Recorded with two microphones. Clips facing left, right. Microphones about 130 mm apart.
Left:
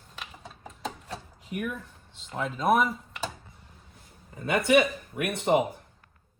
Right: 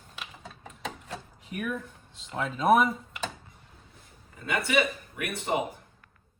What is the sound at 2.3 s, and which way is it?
Speech, centre (ahead or behind).